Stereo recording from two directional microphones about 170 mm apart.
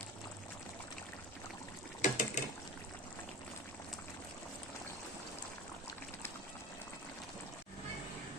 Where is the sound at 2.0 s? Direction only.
50° left (ahead or behind).